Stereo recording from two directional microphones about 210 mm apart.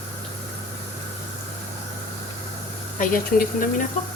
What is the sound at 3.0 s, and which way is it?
Speech, 40° left (ahead or behind).